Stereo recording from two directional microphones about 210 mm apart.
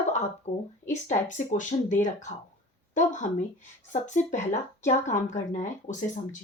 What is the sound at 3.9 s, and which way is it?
Speech, 35° left (ahead or behind).